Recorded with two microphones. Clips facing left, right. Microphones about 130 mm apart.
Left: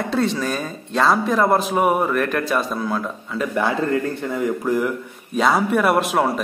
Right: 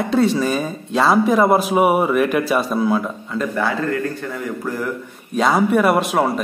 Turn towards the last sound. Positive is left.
turn(degrees=0)  # may be behind; listen again after turning